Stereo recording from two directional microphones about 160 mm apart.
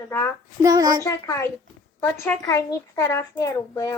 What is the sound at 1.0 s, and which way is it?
A woman's voice, 15° left (ahead or behind).